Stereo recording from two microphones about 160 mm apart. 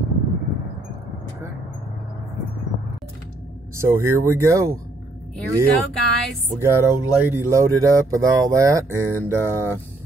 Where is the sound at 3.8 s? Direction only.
15° right (ahead or behind).